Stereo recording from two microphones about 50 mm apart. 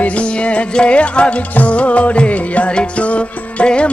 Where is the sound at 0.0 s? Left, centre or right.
Left.